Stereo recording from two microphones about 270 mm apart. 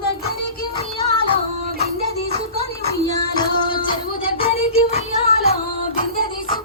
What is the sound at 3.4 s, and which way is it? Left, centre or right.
Music, centre.